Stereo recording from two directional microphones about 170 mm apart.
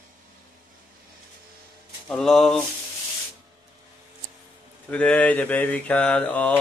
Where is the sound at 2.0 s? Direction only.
Centre (ahead or behind).